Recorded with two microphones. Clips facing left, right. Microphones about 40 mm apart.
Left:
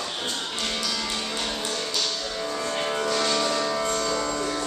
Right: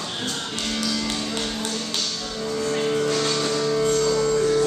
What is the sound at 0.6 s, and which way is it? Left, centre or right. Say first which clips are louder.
Music: right 4 dB; centre.